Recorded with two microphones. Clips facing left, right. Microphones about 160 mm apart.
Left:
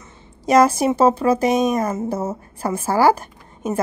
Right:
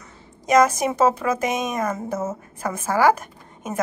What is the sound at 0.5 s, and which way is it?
A woman's voice, 30° left (ahead or behind).